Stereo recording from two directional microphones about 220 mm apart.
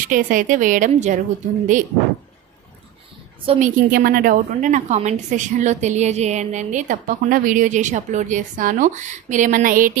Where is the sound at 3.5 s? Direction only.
35° right (ahead or behind).